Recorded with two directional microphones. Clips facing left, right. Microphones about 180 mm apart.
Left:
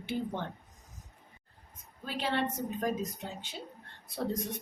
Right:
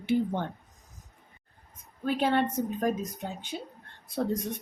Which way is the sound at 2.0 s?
50° right (ahead or behind).